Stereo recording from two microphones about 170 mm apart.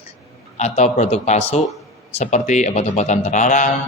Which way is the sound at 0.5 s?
40° left (ahead or behind).